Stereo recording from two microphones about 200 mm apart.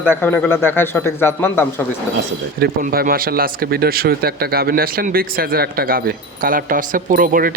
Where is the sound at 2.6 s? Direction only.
50° right (ahead or behind).